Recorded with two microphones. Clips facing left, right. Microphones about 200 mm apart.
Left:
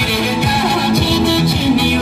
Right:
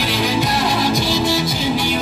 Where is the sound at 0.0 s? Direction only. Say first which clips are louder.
Left 2 dB; 60° left (ahead or behind).